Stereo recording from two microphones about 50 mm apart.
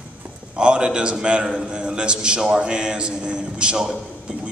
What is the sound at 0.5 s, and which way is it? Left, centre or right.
Speech, centre.